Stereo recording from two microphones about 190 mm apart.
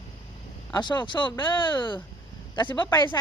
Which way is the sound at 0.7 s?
25° left (ahead or behind).